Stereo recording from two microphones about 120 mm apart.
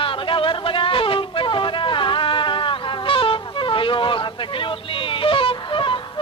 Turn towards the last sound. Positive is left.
turn(degrees=45)  # may be behind; listen again after turning